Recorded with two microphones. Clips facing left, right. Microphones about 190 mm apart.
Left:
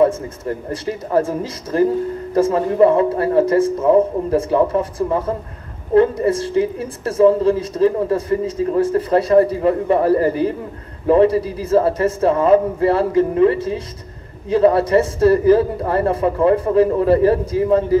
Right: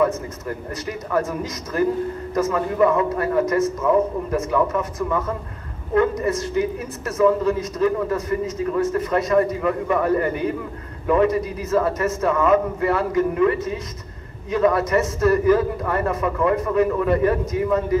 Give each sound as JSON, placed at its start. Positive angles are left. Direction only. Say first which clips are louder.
{"t": 0.0, "sound": "a woman's voice", "louder": "left 5 dB", "side_deg": 30}